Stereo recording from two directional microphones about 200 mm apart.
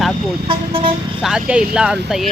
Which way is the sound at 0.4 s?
25° right (ahead or behind).